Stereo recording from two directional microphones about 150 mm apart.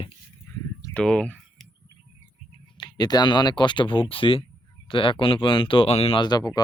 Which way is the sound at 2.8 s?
30° left (ahead or behind).